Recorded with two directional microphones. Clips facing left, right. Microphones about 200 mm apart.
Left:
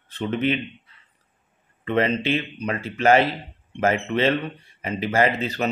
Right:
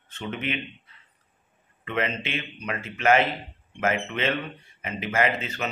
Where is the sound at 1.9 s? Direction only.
35° left (ahead or behind).